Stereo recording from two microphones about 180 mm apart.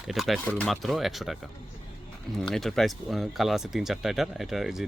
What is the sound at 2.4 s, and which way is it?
Speech, centre (ahead or behind).